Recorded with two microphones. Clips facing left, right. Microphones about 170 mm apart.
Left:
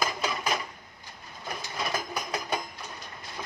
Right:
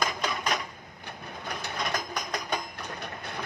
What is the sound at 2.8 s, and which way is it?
Train, 65° right (ahead or behind).